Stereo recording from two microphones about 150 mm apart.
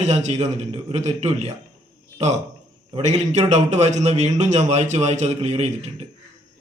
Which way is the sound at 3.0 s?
50° right (ahead or behind).